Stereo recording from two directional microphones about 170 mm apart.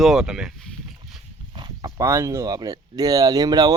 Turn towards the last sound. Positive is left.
turn(degrees=-20)  # may be behind; listen again after turning